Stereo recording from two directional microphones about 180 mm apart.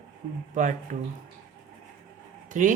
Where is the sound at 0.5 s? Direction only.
45° right (ahead or behind).